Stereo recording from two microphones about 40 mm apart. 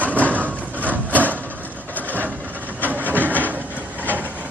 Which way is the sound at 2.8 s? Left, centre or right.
Right.